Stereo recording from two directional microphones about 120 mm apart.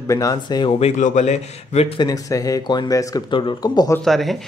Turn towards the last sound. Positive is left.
turn(degrees=0)  # may be behind; listen again after turning